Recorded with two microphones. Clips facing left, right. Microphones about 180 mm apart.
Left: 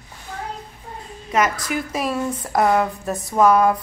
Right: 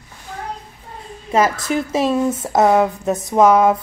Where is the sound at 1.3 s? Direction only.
30° right (ahead or behind).